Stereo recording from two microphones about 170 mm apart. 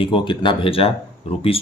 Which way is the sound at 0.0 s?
30° left (ahead or behind).